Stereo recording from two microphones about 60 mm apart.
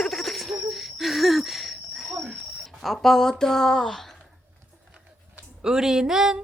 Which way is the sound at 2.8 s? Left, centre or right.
Centre.